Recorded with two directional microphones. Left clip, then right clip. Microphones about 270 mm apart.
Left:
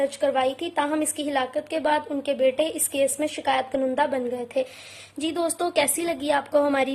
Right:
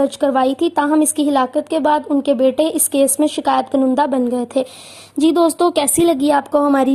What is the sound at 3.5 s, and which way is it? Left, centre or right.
A woman's voice, right.